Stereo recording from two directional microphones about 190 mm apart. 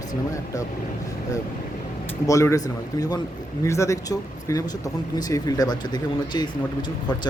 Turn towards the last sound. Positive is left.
turn(degrees=20)  # may be behind; listen again after turning